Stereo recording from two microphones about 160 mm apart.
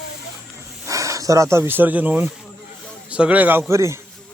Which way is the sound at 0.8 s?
20° right (ahead or behind).